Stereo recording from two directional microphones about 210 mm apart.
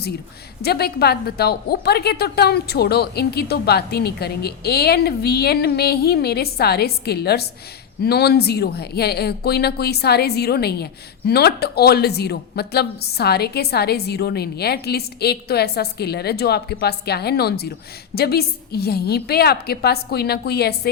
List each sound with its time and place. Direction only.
0.6 s speech: 50° left (ahead or behind)